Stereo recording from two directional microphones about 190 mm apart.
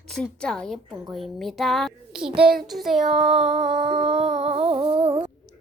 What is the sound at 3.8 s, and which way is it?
Music, 30° right (ahead or behind).